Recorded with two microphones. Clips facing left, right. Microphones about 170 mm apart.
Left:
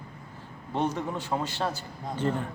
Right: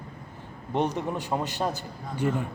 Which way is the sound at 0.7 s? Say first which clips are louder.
Right 2 dB; 15° right (ahead or behind).